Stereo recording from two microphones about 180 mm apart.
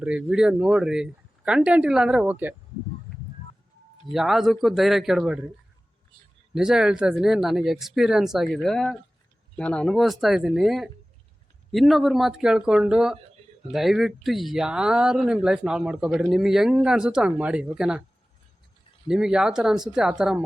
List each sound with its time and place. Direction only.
0.0 s speech: 5° right (ahead or behind)
4.1 s speech: centre (ahead or behind)
6.5 s speech: 5° right (ahead or behind)
19.0 s speech: 5° right (ahead or behind)